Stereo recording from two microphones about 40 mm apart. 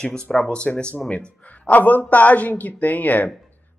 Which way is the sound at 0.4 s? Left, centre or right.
Left.